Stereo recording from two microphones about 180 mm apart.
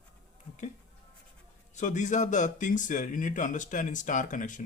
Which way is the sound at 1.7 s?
45° left (ahead or behind).